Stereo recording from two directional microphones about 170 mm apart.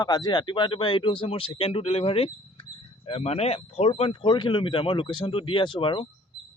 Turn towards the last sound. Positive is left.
turn(degrees=30)  # may be behind; listen again after turning